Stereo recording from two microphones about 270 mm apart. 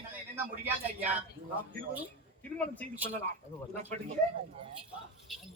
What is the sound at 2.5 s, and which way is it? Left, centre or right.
Speech, centre.